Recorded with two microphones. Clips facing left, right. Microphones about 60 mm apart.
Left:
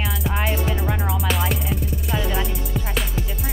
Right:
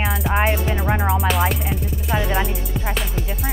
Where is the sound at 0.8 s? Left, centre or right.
Right.